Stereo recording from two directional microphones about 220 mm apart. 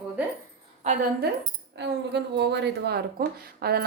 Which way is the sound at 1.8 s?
50° right (ahead or behind).